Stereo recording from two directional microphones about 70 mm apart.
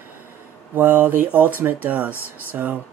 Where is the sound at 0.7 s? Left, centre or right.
Right.